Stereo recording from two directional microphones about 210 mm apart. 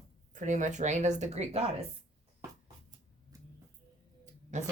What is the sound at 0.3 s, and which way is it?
Speech, 35° right (ahead or behind).